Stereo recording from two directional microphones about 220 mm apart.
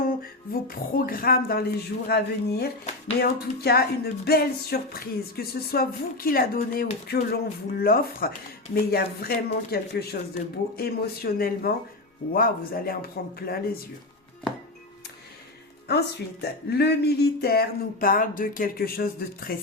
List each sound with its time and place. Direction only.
0.0 s music: 40° left (ahead or behind)
15.9 s music: 45° left (ahead or behind)